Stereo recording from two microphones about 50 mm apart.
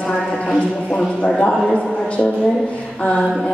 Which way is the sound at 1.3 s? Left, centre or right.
Centre.